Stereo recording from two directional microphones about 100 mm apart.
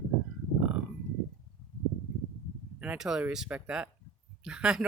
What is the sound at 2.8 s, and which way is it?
Speech, 10° right (ahead or behind).